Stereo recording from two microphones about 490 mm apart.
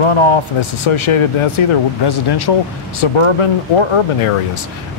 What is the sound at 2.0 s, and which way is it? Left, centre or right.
Speech, left.